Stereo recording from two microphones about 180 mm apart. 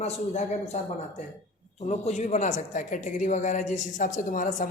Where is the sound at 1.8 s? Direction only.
40° left (ahead or behind).